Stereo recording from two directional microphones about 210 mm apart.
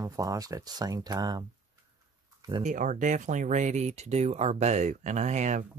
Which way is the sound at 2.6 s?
35° right (ahead or behind).